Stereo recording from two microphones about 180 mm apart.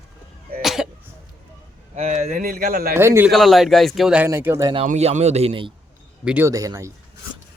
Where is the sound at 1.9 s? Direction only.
40° right (ahead or behind).